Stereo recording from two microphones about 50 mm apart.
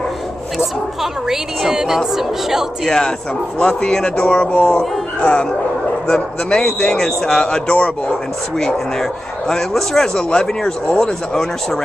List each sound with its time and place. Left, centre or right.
1.3 s a woman's voice: centre
3.5 s a man's voice: centre
8.5 s a man's voice: centre